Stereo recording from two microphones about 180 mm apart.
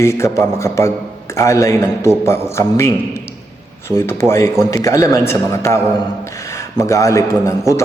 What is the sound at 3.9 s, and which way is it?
A man's voice, 15° left (ahead or behind).